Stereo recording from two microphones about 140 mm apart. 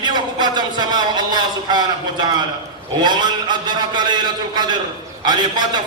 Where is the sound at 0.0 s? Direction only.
30° right (ahead or behind).